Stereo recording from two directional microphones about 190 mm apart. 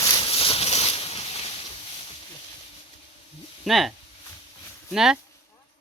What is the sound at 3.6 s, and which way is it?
Speech, centre (ahead or behind).